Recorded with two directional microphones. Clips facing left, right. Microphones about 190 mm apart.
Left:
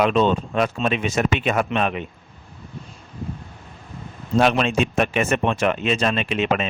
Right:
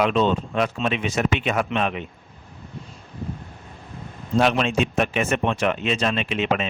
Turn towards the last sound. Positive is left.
turn(degrees=50)  # may be behind; listen again after turning